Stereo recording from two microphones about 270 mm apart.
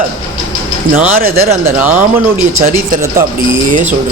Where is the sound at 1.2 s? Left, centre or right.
Right.